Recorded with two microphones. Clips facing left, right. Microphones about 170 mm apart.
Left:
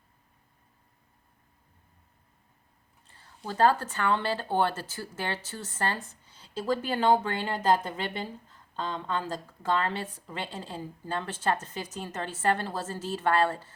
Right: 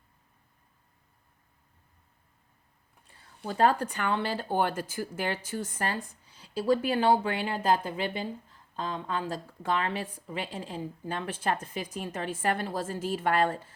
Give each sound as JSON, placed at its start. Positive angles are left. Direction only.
{"t": 3.4, "sound": "speech", "side_deg": -5}
{"t": 3.8, "sound": "a woman's voice", "side_deg": -15}
{"t": 6.2, "sound": "a sound", "side_deg": 30}
{"t": 6.7, "sound": "a woman's voice", "side_deg": -10}